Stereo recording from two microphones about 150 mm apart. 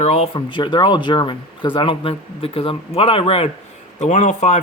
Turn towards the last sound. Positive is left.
turn(degrees=50)  # may be behind; listen again after turning